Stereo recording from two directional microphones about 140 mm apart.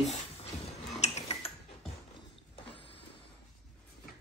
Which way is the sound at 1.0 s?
50° left (ahead or behind).